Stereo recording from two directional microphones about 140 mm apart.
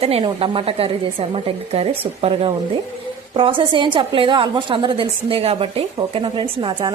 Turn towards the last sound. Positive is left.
turn(degrees=-35)  # may be behind; listen again after turning